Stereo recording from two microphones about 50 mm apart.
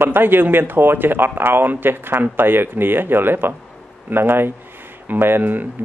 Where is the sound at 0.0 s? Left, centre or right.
Right.